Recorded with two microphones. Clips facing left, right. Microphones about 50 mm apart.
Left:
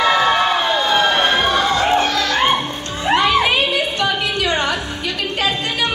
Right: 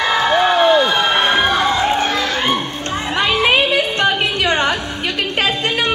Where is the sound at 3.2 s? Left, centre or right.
Right.